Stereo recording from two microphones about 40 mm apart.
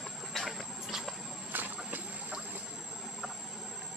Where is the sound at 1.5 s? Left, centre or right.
Right.